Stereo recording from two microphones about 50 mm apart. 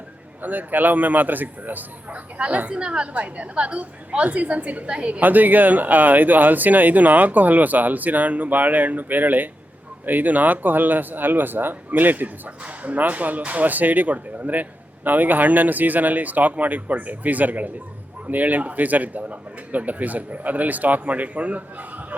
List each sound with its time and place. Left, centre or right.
0.4 s a woman's voice: right
5.2 s speech: right